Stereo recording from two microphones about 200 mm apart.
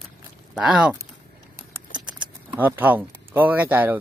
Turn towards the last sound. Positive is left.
turn(degrees=-10)  # may be behind; listen again after turning